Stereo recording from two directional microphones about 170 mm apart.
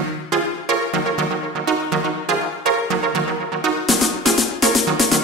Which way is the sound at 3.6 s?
Centre (ahead or behind).